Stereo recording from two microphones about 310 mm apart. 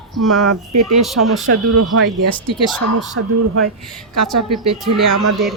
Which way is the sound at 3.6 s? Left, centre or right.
Centre.